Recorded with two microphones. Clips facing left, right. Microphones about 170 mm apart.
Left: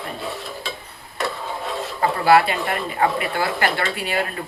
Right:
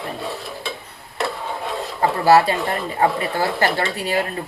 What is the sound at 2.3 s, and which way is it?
Speech, 35° right (ahead or behind).